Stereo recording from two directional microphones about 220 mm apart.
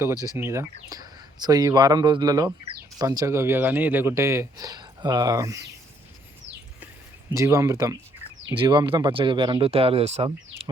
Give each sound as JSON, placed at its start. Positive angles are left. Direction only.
{"t": 0.3, "sound": "speech", "side_deg": -10}
{"t": 7.3, "sound": "speech", "side_deg": -15}